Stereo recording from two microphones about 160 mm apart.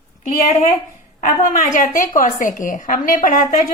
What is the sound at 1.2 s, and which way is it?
A woman's voice, 55° left (ahead or behind).